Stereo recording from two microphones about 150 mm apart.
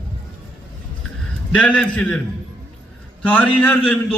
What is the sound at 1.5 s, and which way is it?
Speech, 10° left (ahead or behind).